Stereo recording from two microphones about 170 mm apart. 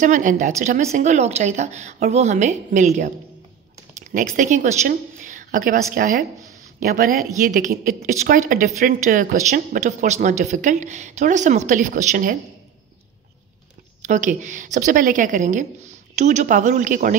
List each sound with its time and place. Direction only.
0.0 s a woman's voice: 50° right (ahead or behind)
14.0 s a woman's voice: 45° right (ahead or behind)